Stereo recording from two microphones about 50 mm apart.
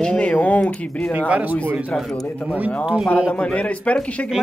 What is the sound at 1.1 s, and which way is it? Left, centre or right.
Speech, right.